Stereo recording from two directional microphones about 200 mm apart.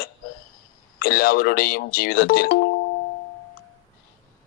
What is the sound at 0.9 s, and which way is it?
Speech, 50° left (ahead or behind).